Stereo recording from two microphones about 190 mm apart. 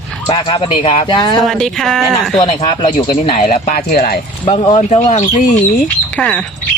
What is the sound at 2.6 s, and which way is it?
Speech, 25° left (ahead or behind).